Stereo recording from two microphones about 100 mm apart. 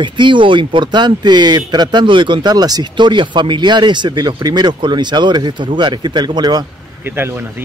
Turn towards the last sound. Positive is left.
turn(degrees=-45)  # may be behind; listen again after turning